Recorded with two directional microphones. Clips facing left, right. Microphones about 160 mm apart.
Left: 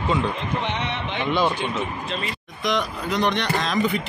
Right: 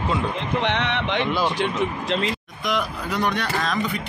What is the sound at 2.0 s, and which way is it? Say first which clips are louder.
Speech: right 5 dB; 90° right.